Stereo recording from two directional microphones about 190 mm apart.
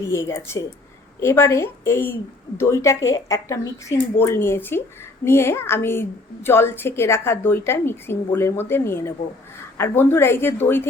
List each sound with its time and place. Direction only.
0.1 s a woman's voice: 15° left (ahead or behind)